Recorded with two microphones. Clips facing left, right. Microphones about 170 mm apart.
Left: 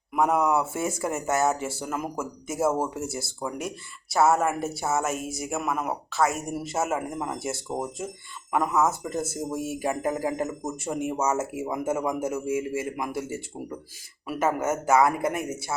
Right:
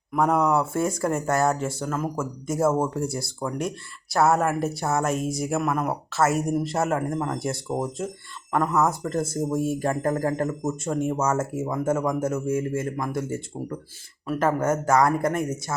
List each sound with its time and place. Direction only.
0.1 s speech: 5° left (ahead or behind)